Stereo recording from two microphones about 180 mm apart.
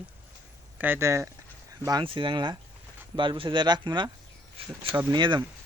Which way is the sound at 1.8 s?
25° right (ahead or behind).